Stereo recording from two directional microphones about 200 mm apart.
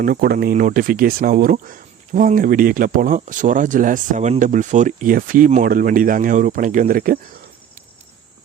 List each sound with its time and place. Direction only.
0.0 s speech: 45° right (ahead or behind)